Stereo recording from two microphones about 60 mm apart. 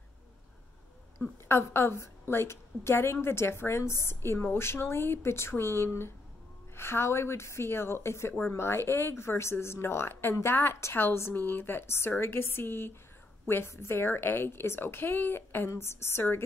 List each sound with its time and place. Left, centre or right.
1.1 s a woman's voice: left